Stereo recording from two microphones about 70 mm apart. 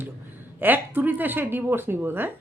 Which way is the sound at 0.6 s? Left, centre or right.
Right.